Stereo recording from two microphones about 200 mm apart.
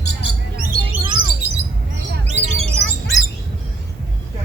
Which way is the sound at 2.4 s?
70° right (ahead or behind).